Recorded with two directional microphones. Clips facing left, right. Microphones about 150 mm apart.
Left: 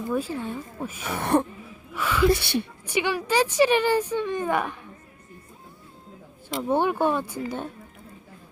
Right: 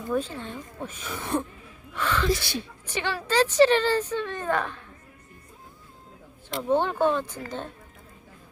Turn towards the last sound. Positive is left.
turn(degrees=10)  # may be behind; listen again after turning